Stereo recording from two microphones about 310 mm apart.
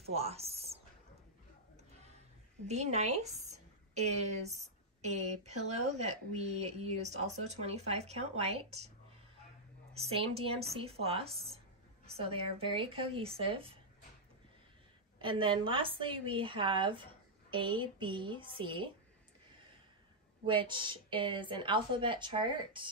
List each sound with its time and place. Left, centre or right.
0.0 s speech: centre
2.7 s speech: right
9.9 s a woman's voice: centre
15.1 s a woman's voice: centre
20.4 s a woman's voice: centre